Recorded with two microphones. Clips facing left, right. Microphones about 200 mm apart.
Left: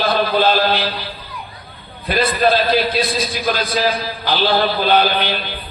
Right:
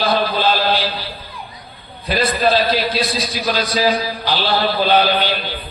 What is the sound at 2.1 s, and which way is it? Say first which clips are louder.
A man's voice: left 1 dB; 50° left (ahead or behind).